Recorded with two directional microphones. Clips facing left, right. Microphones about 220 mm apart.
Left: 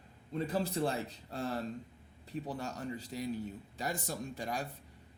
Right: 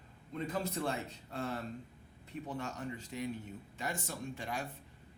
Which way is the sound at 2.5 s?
35° left (ahead or behind).